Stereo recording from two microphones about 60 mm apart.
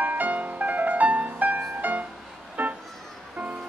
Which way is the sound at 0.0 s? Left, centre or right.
Right.